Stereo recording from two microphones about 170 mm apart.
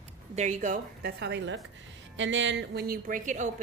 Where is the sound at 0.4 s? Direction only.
45° right (ahead or behind).